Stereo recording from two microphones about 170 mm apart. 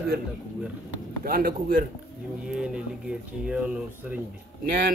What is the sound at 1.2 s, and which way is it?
Speech, 60° right (ahead or behind).